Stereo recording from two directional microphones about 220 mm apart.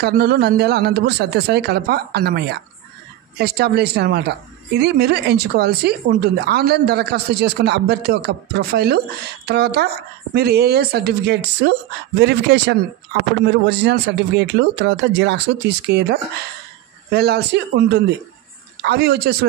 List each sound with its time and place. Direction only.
0.0 s a woman's voice: 45° right (ahead or behind)